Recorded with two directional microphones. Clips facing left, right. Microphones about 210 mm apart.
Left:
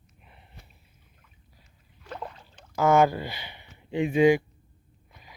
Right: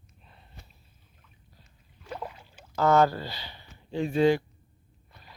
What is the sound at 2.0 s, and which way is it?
Rowboat, 5° right (ahead or behind).